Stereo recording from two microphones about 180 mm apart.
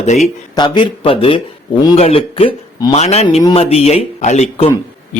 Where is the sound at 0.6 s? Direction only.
25° left (ahead or behind).